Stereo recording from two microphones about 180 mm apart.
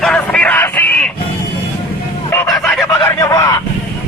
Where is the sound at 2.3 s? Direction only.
15° left (ahead or behind).